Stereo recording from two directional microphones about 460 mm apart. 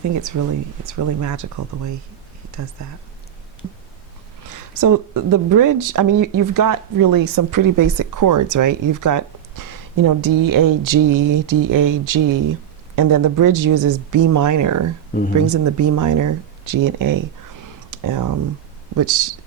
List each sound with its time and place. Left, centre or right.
0.1 s speech: right
4.4 s a woman's voice: right
15.1 s speech: centre
15.4 s speech: right